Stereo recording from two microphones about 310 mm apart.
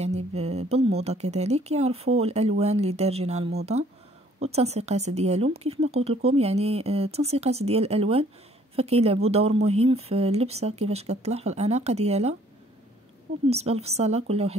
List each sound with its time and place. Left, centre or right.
0.0 s speech: right
13.5 s speech: centre